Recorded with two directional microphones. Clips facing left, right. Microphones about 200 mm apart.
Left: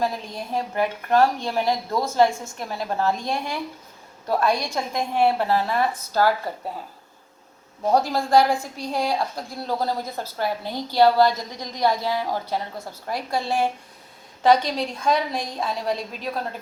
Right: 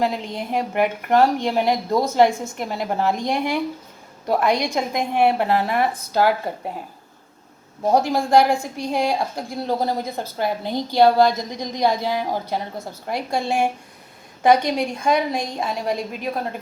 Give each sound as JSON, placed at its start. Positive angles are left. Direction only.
{"t": 0.0, "sound": "a woman's voice", "side_deg": -20}
{"t": 7.9, "sound": "a woman's voice", "side_deg": -10}
{"t": 14.7, "sound": "a woman's voice", "side_deg": -15}